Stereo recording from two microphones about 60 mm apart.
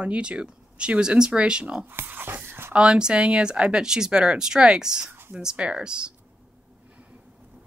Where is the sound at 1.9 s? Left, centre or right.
Right.